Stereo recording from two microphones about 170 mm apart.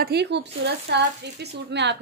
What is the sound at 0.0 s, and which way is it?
Speech, 80° right.